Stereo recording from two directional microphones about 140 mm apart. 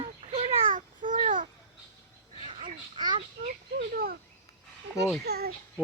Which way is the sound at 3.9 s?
90° right.